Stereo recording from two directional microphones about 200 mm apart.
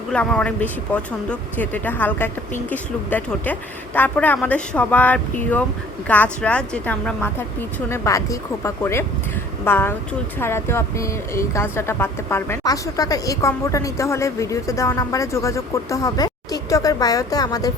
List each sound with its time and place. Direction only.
0.1 s speech: 5° left (ahead or behind)